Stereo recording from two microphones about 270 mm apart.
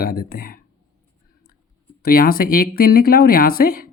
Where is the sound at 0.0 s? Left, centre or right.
Left.